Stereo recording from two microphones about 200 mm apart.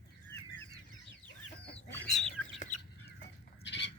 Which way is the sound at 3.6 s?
60° left (ahead or behind).